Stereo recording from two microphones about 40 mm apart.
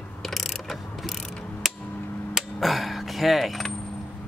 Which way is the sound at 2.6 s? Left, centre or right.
Centre.